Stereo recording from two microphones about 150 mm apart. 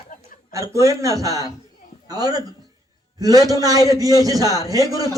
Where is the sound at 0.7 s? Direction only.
20° right (ahead or behind).